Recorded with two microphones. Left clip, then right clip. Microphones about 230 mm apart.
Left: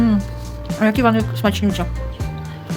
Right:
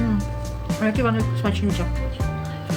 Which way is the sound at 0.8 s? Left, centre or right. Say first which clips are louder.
Left 6 dB; left.